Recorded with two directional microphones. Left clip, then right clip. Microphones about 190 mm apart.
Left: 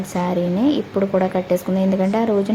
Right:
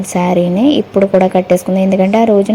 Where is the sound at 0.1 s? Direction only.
20° right (ahead or behind).